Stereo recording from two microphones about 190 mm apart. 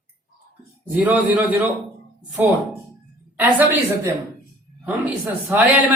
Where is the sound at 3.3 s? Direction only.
10° right (ahead or behind).